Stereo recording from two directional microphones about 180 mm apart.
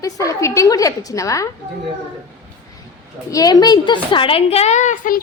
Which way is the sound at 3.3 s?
20° left (ahead or behind).